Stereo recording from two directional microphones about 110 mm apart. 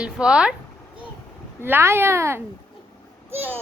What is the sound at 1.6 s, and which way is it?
Speech, 20° right (ahead or behind).